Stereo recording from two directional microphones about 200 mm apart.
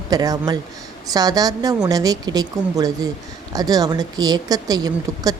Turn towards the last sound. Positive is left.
turn(degrees=-20)  # may be behind; listen again after turning